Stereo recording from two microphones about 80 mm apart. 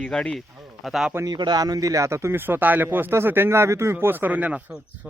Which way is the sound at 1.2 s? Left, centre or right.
Right.